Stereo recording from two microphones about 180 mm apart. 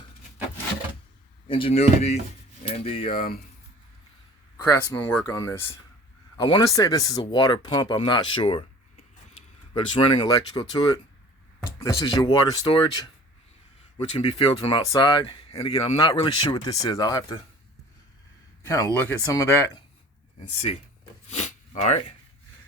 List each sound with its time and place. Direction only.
1.5 s speech: 30° left (ahead or behind)
3.1 s speech: 55° left (ahead or behind)
4.5 s speech: 15° left (ahead or behind)
9.7 s speech: 30° left (ahead or behind)
18.6 s speech: 15° left (ahead or behind)
21.2 s a sound: 35° left (ahead or behind)